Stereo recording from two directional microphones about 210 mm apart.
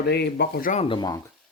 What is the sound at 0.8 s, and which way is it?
Speech, 20° left (ahead or behind).